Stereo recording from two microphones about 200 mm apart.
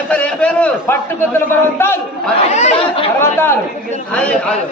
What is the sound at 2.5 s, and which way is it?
Speech, 35° left (ahead or behind).